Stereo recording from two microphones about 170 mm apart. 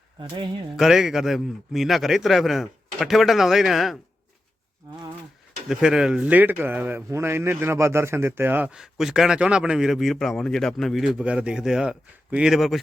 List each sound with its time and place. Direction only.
0.2 s speech: 30° right (ahead or behind)
0.8 s a man's voice: 5° right (ahead or behind)
5.6 s a man's voice: 5° right (ahead or behind)